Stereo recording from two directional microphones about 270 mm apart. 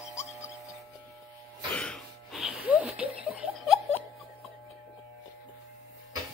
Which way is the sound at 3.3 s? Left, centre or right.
Centre.